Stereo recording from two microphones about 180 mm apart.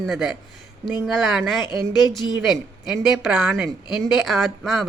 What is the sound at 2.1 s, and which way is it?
Speech, 25° left (ahead or behind).